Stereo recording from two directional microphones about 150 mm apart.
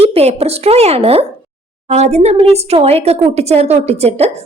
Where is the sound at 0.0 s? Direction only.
40° right (ahead or behind).